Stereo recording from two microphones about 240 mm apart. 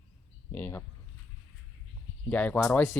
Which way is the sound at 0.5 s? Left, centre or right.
Centre.